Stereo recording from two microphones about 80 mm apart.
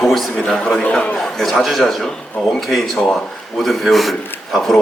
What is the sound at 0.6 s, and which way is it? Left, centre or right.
Speech, centre.